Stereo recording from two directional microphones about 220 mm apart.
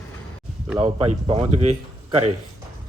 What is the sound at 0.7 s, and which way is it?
Speech, 30° right (ahead or behind).